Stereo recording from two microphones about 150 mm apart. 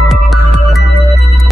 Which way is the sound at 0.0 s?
Centre (ahead or behind).